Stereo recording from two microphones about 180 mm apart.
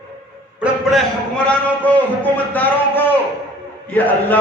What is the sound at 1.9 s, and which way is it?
A man's voice, 10° left (ahead or behind).